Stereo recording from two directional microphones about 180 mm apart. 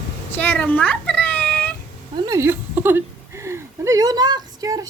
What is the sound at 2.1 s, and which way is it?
Speech, 20° right (ahead or behind).